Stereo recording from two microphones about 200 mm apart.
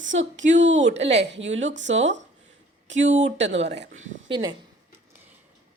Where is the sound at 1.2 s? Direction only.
65° right (ahead or behind).